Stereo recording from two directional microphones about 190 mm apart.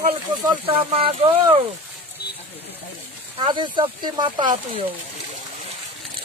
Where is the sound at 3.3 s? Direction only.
25° right (ahead or behind).